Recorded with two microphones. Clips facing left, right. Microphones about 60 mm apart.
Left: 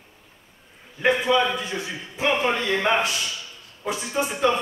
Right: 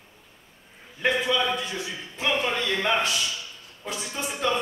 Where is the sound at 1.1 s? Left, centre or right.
Left.